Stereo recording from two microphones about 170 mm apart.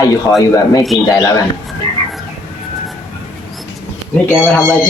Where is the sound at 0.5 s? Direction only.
20° left (ahead or behind).